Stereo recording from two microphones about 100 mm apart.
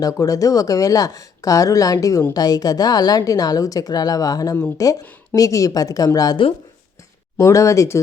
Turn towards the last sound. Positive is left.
turn(degrees=30)  # may be behind; listen again after turning